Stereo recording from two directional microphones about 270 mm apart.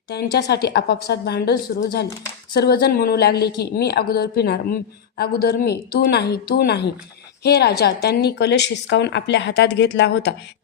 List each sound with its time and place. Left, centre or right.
0.1 s a woman's voice: left